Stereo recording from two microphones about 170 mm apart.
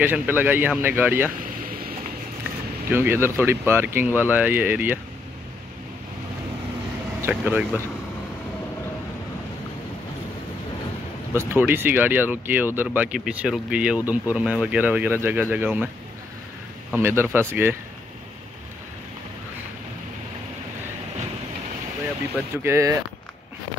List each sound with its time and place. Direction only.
0.0 s speech: 10° right (ahead or behind)
1.4 s vehicle: 55° right (ahead or behind)
2.9 s speech: 15° right (ahead or behind)
7.2 s speech: 10° right (ahead or behind)
11.3 s speech: 10° right (ahead or behind)
17.0 s speech: 15° right (ahead or behind)
22.6 s speech: 15° right (ahead or behind)